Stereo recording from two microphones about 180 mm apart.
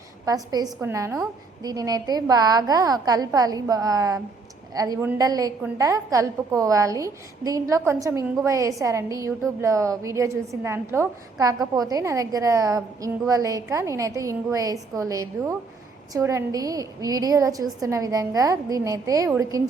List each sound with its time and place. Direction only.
0.3 s a woman's voice: 20° right (ahead or behind)